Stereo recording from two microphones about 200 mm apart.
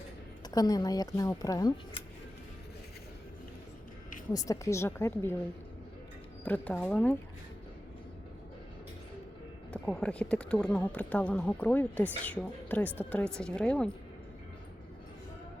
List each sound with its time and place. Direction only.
0.5 s speech: 20° left (ahead or behind)
4.3 s speech: 15° left (ahead or behind)
6.4 s speech: 10° left (ahead or behind)
9.7 s speech: 5° left (ahead or behind)